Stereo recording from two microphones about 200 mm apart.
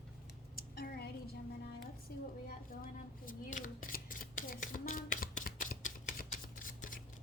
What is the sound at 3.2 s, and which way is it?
Scissors, 45° left (ahead or behind).